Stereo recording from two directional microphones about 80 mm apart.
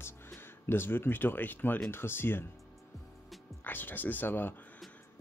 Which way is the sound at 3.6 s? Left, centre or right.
Left.